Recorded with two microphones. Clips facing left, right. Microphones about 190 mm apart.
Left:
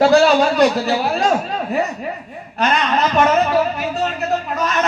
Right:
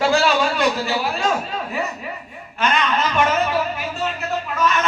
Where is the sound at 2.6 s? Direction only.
40° left (ahead or behind).